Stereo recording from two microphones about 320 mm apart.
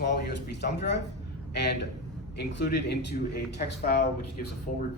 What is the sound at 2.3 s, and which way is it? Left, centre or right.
Speech, left.